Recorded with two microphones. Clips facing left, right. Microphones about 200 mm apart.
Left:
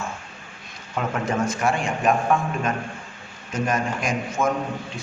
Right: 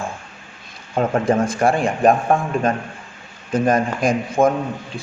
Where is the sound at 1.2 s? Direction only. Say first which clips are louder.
Right 4 dB; 30° right (ahead or behind).